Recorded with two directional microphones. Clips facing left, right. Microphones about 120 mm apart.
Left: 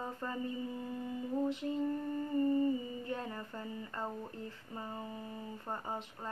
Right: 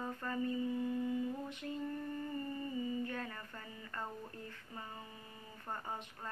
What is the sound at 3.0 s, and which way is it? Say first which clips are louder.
A woman's voice: left 3 dB; 25° left (ahead or behind).